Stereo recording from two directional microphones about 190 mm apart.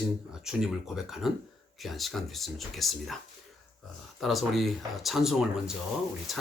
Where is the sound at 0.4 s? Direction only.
Centre (ahead or behind).